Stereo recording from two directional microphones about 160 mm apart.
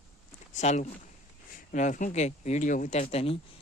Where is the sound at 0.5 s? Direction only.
45° left (ahead or behind).